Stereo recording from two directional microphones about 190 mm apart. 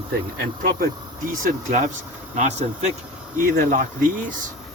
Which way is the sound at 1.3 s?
45° right (ahead or behind).